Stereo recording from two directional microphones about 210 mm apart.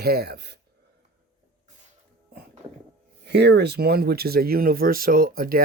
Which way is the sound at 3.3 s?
55° right (ahead or behind).